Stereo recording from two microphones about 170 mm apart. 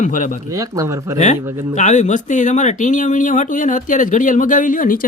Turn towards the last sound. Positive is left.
turn(degrees=55)  # may be behind; listen again after turning